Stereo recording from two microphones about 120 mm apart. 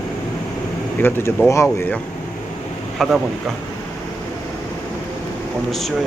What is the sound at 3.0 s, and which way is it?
Speech, 5° left (ahead or behind).